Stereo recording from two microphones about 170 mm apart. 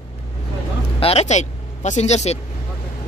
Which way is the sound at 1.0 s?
35° left (ahead or behind).